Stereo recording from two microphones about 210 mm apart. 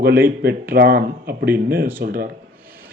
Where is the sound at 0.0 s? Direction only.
45° right (ahead or behind).